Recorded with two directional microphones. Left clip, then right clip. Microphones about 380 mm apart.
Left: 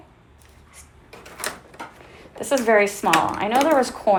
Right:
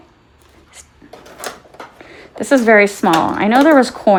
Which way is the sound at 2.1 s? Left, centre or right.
Right.